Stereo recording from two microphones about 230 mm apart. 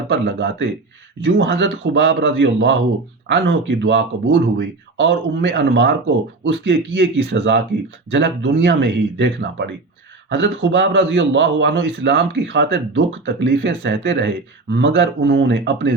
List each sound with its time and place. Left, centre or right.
0.1 s a man's voice: right